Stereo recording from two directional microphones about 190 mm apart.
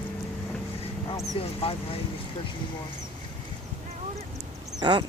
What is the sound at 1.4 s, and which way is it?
Speech, 30° left (ahead or behind).